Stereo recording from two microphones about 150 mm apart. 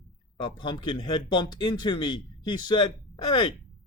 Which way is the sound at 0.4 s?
30° left (ahead or behind).